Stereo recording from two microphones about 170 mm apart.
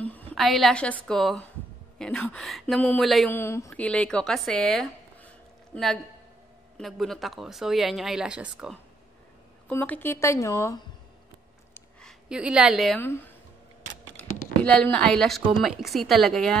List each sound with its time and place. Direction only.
0.0 s a sound: 10° left (ahead or behind)
0.3 s speech: centre (ahead or behind)
3.3 s speech: 15° left (ahead or behind)
6.8 s speech: centre (ahead or behind)
9.7 s speech: 10° left (ahead or behind)
11.7 s a sound: 5° left (ahead or behind)
13.0 s speech: 10° left (ahead or behind)
14.6 s speech: 5° left (ahead or behind)